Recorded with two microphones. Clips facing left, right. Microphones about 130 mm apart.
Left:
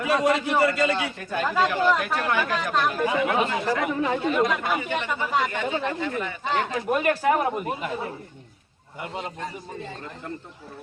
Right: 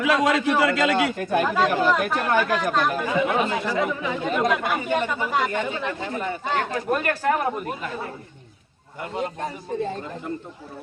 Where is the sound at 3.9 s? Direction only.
45° left (ahead or behind).